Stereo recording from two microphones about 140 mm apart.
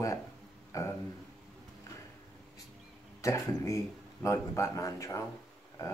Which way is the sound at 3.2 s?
20° left (ahead or behind).